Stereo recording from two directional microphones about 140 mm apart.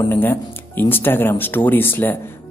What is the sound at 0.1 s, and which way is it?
Speech, 15° left (ahead or behind).